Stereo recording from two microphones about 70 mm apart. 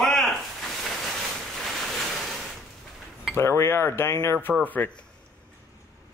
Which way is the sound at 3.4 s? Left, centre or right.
Left.